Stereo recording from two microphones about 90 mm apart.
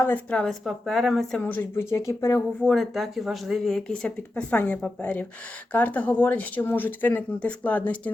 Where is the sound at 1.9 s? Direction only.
30° left (ahead or behind).